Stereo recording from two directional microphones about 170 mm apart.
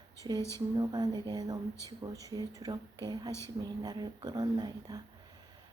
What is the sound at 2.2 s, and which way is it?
Speech, 20° right (ahead or behind).